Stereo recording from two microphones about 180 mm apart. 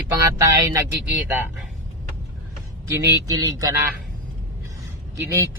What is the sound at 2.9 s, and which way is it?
Speech, 20° right (ahead or behind).